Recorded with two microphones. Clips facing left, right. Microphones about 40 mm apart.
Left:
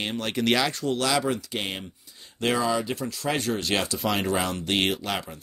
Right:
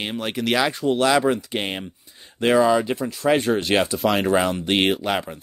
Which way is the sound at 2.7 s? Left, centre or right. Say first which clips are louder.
Right 7 dB; right.